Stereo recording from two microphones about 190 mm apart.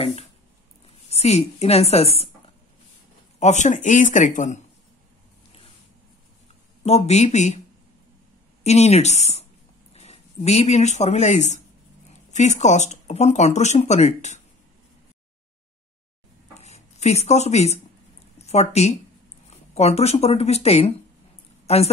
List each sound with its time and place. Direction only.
0.0 s a sound: 30° left (ahead or behind)
0.8 s a woman's voice: 35° left (ahead or behind)
3.3 s speech: 40° left (ahead or behind)
6.8 s speech: 35° left (ahead or behind)
8.6 s speech: 35° left (ahead or behind)
16.5 s a sound: 35° left (ahead or behind)
18.4 s speech: 35° left (ahead or behind)